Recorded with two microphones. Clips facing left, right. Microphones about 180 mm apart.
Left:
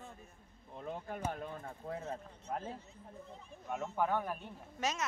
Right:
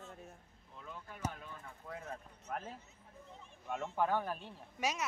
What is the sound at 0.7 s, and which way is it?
Speech, 55° left (ahead or behind).